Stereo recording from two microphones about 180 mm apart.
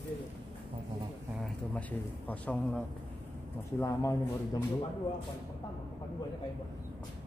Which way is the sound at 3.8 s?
15° left (ahead or behind).